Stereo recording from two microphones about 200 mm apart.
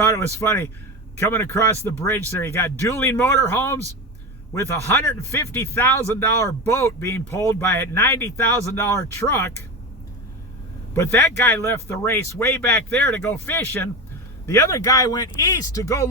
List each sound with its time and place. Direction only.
0.0 s a man's voice: 15° left (ahead or behind)
10.9 s a man's voice: 10° left (ahead or behind)